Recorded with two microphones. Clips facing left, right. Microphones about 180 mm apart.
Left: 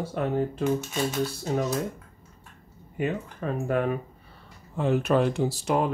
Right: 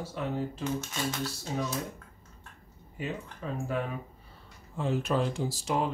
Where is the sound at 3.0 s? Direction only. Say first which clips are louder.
Left 8 dB; 60° left (ahead or behind).